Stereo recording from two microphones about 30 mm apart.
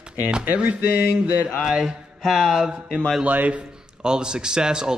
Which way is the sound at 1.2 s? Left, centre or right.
Right.